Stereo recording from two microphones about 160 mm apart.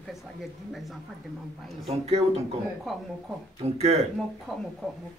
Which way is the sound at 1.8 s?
40° right (ahead or behind).